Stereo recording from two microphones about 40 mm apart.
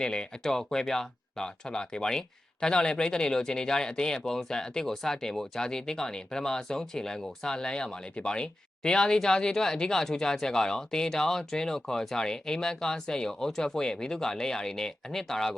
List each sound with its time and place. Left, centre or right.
0.0 s speech: centre